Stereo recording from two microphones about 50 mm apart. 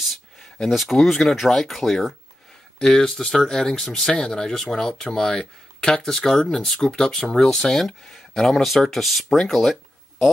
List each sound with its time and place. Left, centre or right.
0.0 s a sound: centre
0.6 s speech: centre
2.8 s speech: centre